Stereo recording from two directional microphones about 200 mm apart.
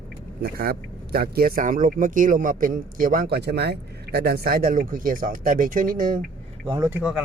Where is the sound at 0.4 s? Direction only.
50° right (ahead or behind).